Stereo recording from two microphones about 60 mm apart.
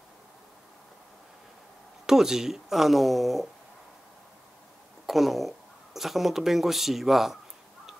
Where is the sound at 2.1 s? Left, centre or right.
Centre.